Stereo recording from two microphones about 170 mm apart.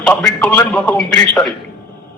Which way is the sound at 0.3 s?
10° left (ahead or behind).